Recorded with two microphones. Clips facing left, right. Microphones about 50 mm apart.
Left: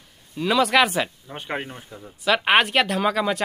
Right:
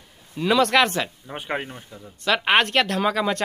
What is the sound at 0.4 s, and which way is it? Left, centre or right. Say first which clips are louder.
Speech: even; centre.